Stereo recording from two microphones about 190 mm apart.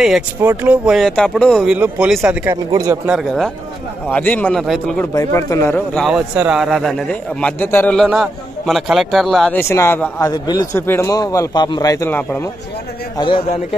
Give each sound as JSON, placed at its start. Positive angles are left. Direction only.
{"t": 0.0, "sound": "a man's voice", "side_deg": -5}
{"t": 2.5, "sound": "speech", "side_deg": -20}
{"t": 3.1, "sound": "a man's voice", "side_deg": 0}
{"t": 5.1, "sound": "a man's voice", "side_deg": 15}
{"t": 6.0, "sound": "a man's voice", "side_deg": -5}
{"t": 9.6, "sound": "a man's voice", "side_deg": 15}
{"t": 10.3, "sound": "a man's voice", "side_deg": 20}